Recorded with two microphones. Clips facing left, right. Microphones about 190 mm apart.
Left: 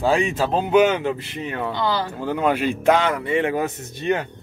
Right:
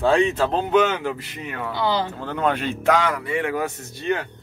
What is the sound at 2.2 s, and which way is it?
Speech, 10° left (ahead or behind).